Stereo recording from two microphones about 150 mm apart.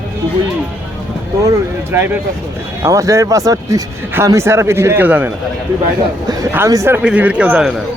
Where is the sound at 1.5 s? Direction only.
15° right (ahead or behind).